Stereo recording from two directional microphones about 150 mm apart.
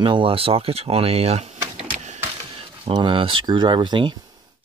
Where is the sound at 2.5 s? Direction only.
35° right (ahead or behind).